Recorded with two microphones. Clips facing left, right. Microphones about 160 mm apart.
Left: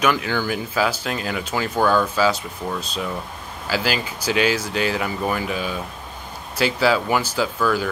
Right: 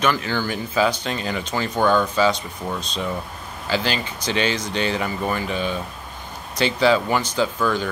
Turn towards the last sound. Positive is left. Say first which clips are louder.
# even
turn(degrees=5)  # may be behind; listen again after turning